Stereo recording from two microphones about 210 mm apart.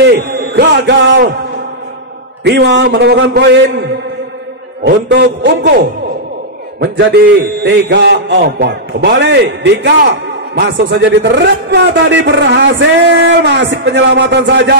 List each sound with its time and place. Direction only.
0.0 s a sound: 55° right (ahead or behind)
2.4 s a man's voice: 55° right (ahead or behind)
4.8 s a man's voice: 55° right (ahead or behind)
6.8 s a man's voice: 55° right (ahead or behind)